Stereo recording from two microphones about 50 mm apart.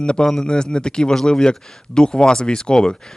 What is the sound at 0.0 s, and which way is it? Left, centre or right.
Speech, centre.